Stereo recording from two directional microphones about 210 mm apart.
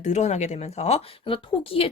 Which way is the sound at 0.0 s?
35° left (ahead or behind).